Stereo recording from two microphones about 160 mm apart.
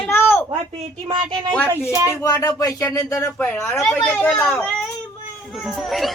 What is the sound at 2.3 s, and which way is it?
Speech, 20° left (ahead or behind).